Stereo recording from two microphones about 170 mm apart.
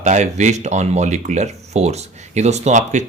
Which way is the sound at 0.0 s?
45° right (ahead or behind).